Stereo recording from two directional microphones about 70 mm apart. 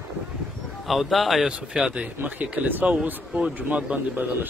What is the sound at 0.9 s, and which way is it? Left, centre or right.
Speech, centre.